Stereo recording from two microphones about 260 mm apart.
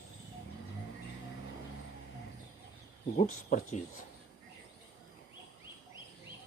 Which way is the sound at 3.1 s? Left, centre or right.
Left.